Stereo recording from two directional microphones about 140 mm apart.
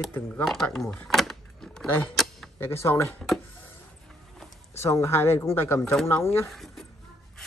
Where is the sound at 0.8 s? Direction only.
5° left (ahead or behind).